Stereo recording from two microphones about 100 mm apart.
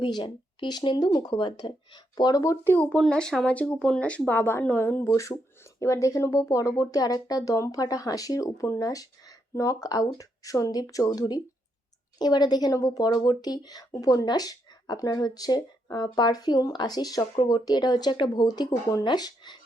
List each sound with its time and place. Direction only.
0.0 s speech: 50° left (ahead or behind)
2.6 s a woman's voice: 15° left (ahead or behind); by 19.5 s 45° left (ahead or behind)